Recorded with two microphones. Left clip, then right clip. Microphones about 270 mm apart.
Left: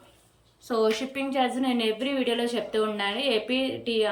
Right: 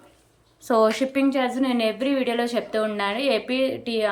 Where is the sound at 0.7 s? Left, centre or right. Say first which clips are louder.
Right 6 dB; centre.